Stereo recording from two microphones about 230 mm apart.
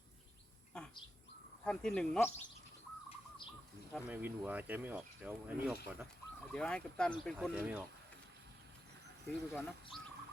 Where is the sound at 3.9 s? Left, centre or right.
Centre.